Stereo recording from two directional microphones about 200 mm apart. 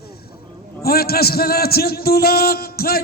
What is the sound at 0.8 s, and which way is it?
A man's voice, 50° left (ahead or behind).